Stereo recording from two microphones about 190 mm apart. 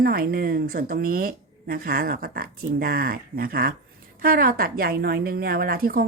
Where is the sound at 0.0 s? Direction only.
50° right (ahead or behind).